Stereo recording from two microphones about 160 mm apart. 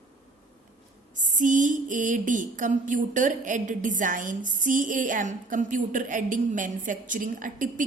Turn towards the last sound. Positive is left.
turn(degrees=-55)  # may be behind; listen again after turning